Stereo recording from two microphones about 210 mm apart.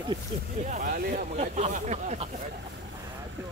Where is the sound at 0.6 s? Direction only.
35° right (ahead or behind).